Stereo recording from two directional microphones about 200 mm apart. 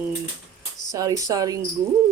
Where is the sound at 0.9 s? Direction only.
15° right (ahead or behind).